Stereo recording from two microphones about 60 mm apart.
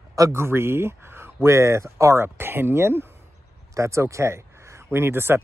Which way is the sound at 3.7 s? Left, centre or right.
Right.